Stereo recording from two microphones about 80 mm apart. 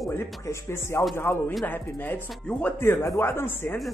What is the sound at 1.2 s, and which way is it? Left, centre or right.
Speech, left.